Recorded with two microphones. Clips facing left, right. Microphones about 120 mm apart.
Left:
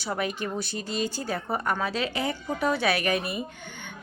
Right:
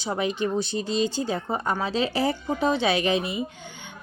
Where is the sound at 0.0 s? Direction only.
20° right (ahead or behind).